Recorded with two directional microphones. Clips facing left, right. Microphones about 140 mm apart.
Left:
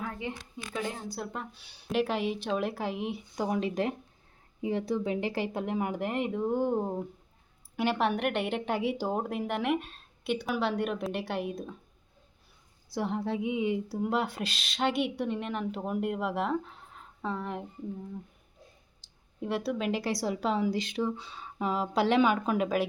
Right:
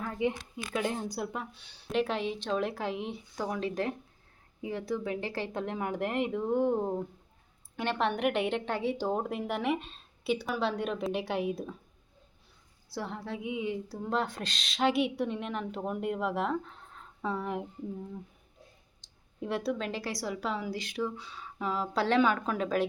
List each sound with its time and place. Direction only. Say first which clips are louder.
0.2 s a woman's voice: right 7 dB; 20° right (ahead or behind); by 3.2 s 5° left (ahead or behind)
3.3 s a woman's voice: left 3 dB; 15° left (ahead or behind); by 11.7 s centre (ahead or behind)
12.9 s a woman's voice: left 6 dB; 20° left (ahead or behind); by 17.7 s 5° right (ahead or behind)
19.0 s a sound: left 1 dB; centre (ahead or behind)
19.9 s speech: left 5 dB; 20° left (ahead or behind)